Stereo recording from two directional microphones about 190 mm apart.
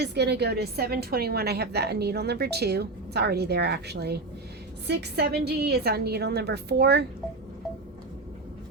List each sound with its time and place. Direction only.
0.0 s a woman's voice: 60° right (ahead or behind)